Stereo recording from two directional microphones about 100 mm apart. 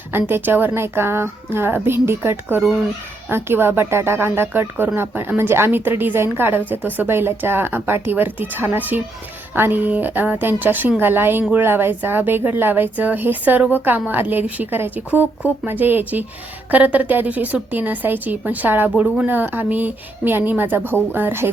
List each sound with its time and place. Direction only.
0.1 s a woman's voice: 20° right (ahead or behind)